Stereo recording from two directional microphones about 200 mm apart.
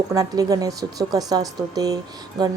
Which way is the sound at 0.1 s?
15° right (ahead or behind).